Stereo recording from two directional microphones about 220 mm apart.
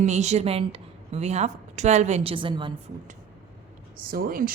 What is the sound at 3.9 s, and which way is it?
Speech, 40° right (ahead or behind).